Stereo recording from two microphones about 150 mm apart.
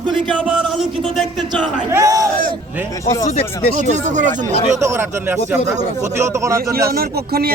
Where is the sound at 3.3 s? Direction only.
40° left (ahead or behind).